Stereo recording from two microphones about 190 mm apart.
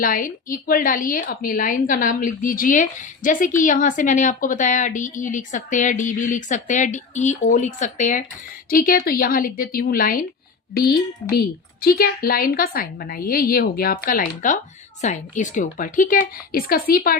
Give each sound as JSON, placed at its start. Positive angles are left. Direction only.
{"t": 0.0, "sound": "a woman's voice", "side_deg": 45}